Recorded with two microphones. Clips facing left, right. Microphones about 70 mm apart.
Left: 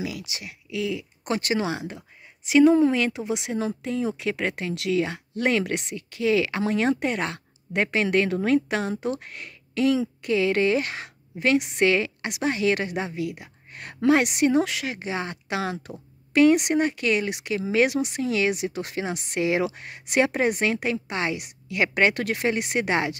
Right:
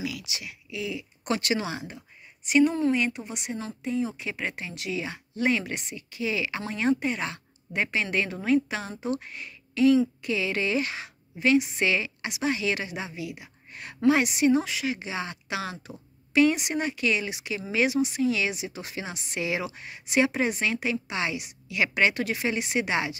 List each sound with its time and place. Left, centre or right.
0.0 s speech: left
0.7 s speech: left
1.2 s speech: left
1.6 s speech: left
2.5 s speech: left
4.2 s a woman's voice: left